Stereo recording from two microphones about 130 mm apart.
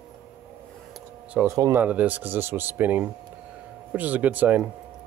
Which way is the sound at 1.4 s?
25° right (ahead or behind).